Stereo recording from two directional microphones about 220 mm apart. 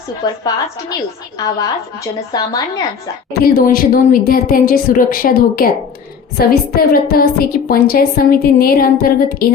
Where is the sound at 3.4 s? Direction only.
40° left (ahead or behind).